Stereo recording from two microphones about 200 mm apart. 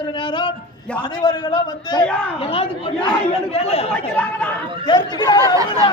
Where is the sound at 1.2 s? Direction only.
20° left (ahead or behind).